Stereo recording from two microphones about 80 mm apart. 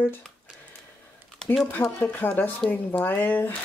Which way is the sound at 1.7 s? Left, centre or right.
Centre.